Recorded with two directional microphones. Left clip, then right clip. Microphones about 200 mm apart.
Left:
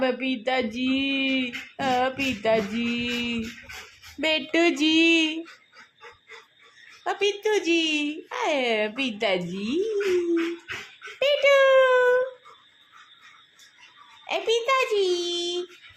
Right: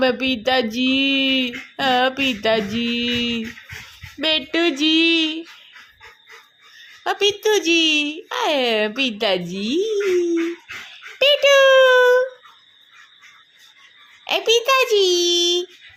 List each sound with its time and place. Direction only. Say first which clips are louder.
0.0 s speech: right 7 dB; 20° right (ahead or behind)
4.2 s a sound: right 3 dB; 5° right (ahead or behind)
7.0 s speech: right 6 dB; 15° right (ahead or behind)
11.2 s speech: right 6 dB; 15° right (ahead or behind)
14.3 s speech: right 7 dB; 20° right (ahead or behind)